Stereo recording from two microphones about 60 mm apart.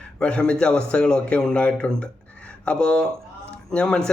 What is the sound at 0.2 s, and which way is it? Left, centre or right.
A man's voice, centre.